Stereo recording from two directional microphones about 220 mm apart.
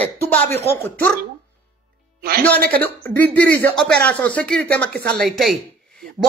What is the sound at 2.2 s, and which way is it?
Speech, 45° right (ahead or behind).